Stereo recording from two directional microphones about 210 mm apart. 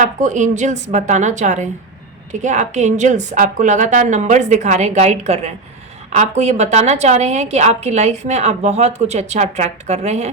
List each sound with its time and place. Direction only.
0.0 s a woman's voice: 35° right (ahead or behind)